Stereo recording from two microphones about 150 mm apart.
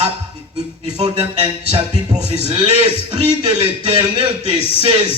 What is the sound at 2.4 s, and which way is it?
A man's voice, 45° right (ahead or behind).